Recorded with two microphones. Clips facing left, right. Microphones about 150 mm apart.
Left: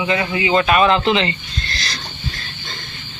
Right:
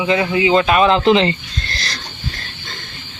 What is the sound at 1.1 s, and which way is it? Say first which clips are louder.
Speech: right 5 dB; 35° right (ahead or behind).